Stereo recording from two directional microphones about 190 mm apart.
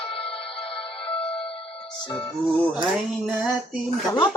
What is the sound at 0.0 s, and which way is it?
Music, 30° left (ahead or behind).